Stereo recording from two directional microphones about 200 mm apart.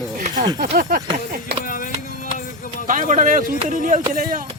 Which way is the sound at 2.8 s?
40° right (ahead or behind).